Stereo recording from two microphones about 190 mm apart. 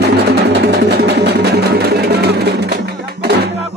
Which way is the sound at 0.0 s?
60° right (ahead or behind).